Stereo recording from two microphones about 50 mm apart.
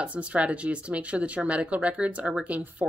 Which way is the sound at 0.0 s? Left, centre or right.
Right.